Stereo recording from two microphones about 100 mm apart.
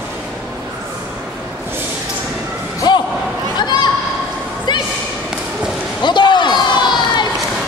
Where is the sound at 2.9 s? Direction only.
45° left (ahead or behind).